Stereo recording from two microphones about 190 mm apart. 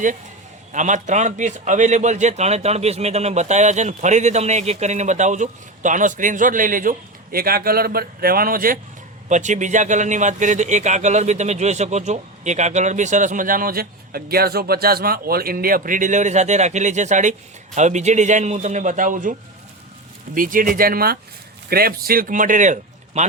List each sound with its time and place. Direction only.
0.7 s a man's voice: 40° right (ahead or behind)